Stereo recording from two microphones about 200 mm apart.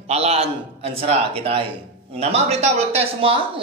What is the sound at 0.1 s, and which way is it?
A man's voice, 30° right (ahead or behind).